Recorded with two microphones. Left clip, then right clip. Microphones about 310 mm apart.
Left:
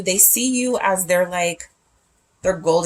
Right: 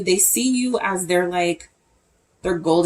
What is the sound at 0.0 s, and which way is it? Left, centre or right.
Speech, left.